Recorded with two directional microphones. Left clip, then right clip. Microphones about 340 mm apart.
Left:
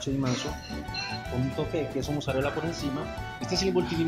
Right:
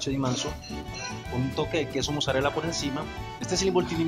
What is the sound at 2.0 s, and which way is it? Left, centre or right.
Speech, right.